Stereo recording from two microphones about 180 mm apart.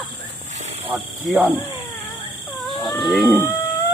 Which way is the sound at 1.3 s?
10° right (ahead or behind).